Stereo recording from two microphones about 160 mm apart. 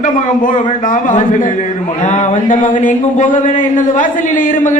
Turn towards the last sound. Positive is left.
turn(degrees=55)  # may be behind; listen again after turning